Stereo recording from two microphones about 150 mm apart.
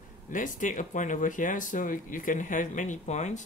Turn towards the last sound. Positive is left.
turn(degrees=50)  # may be behind; listen again after turning